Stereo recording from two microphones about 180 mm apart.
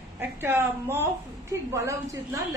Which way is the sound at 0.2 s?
10° right (ahead or behind).